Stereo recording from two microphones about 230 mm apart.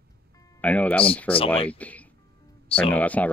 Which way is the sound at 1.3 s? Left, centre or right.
Left.